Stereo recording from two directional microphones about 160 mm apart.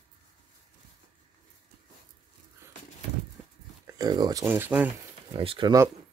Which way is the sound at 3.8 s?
25° right (ahead or behind).